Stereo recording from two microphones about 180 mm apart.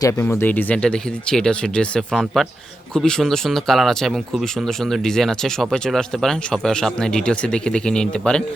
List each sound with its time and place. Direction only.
0.0 s speech: 15° left (ahead or behind)